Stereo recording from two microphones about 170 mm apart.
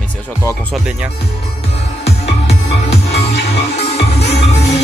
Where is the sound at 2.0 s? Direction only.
40° left (ahead or behind).